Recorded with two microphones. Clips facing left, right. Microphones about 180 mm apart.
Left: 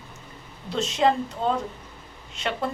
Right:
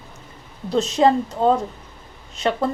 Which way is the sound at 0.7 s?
40° right (ahead or behind).